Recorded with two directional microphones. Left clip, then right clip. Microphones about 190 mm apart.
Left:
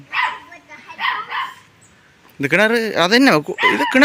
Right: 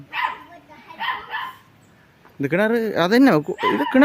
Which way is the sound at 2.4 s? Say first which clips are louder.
Left 5 dB; 5° right (ahead or behind).